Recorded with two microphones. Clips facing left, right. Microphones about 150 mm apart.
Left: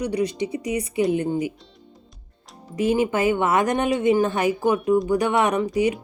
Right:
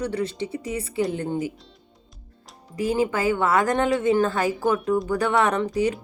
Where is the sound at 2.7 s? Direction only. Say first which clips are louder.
Left 2 dB; 20° left (ahead or behind).